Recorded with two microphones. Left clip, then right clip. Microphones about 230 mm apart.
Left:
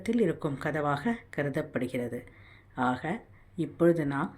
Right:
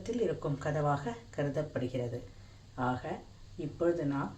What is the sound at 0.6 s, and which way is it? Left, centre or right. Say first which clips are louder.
Speech: left 3 dB; left.